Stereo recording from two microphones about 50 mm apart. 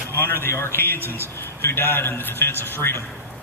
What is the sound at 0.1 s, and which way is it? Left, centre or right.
A man's voice, left.